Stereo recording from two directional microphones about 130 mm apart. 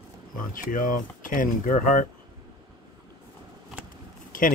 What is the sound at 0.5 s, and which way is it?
Speech, 90° left.